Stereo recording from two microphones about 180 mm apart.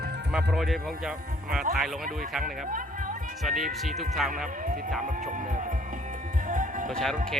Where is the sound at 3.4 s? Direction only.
Centre (ahead or behind).